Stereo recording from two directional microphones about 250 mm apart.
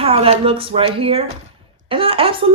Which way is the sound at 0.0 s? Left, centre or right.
Right.